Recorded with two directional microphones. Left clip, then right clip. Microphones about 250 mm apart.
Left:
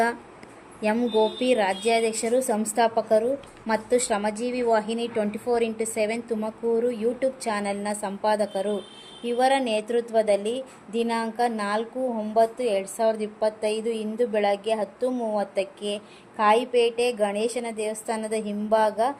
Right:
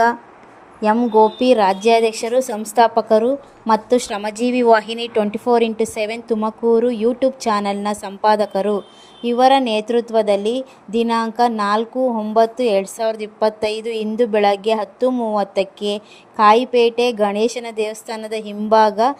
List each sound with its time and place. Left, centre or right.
0.8 s a woman's voice: centre; by 19.1 s right